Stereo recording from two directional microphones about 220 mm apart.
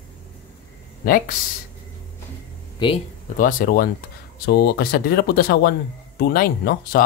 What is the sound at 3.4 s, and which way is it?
Speech, 40° left (ahead or behind).